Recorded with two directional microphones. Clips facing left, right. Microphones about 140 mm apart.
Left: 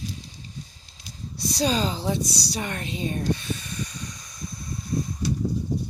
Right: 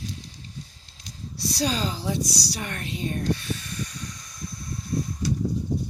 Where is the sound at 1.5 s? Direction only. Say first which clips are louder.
Left 3 dB; 20° left (ahead or behind).